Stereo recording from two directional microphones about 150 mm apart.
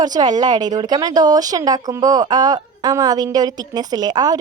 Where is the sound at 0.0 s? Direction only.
25° right (ahead or behind).